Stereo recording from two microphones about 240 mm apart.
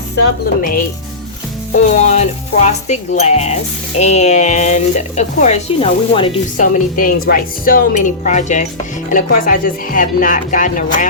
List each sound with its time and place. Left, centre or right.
0.2 s a woman's voice: left
2.1 s speech: left
6.6 s a woman's voice: left